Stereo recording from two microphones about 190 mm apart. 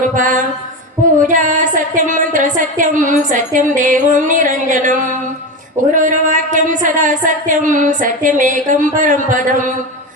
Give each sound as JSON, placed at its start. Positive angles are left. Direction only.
{"t": 0.2, "sound": "speech", "side_deg": -45}